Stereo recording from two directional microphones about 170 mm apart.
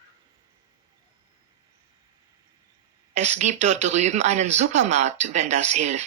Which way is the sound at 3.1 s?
45° right (ahead or behind).